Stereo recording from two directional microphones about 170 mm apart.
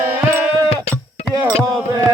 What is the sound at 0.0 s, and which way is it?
Music, 15° right (ahead or behind).